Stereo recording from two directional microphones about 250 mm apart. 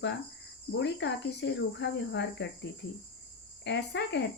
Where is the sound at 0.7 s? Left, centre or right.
Left.